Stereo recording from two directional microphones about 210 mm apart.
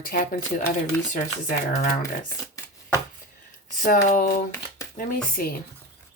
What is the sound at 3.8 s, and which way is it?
Speech, 40° left (ahead or behind).